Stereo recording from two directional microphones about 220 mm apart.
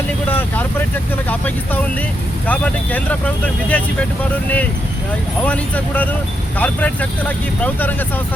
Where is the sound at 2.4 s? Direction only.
5° left (ahead or behind).